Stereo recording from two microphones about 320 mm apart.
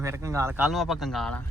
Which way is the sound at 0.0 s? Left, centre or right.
Centre.